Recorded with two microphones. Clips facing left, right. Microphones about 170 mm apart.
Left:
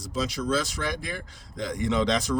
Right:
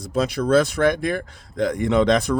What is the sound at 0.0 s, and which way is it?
Speech, 55° right (ahead or behind).